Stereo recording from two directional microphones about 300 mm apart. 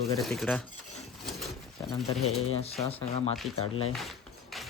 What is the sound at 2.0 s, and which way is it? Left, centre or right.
Speech, centre.